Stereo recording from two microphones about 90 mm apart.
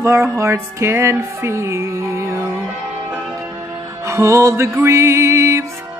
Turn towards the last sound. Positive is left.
turn(degrees=-30)  # may be behind; listen again after turning